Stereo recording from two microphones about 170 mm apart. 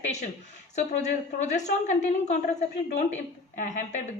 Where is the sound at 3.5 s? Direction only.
45° left (ahead or behind).